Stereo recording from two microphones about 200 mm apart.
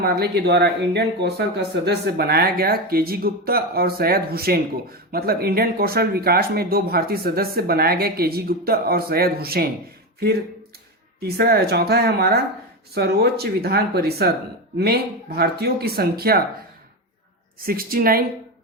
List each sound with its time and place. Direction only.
0.0 s speech: 50° right (ahead or behind)
11.2 s speech: 50° right (ahead or behind)
17.7 s speech: 45° right (ahead or behind)